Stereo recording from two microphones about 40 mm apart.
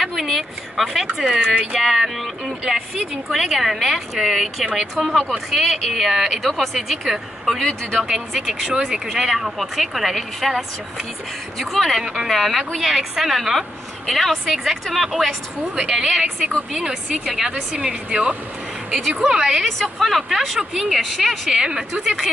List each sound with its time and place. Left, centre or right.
0.0 s speech: centre
1.2 s a woman's voice: centre
1.8 s a woman's voice: centre
4.9 s speech: centre
5.5 s speech: centre
8.7 s a woman's voice: centre
13.6 s speech: centre
14.3 s a woman's voice: centre
15.7 s a woman's voice: centre
19.4 s a woman's voice: centre
19.8 s speech: centre
20.2 s speech: centre
21.6 s a woman's voice: centre